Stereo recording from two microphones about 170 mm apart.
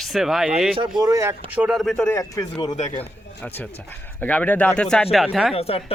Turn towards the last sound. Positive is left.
turn(degrees=35)  # may be behind; listen again after turning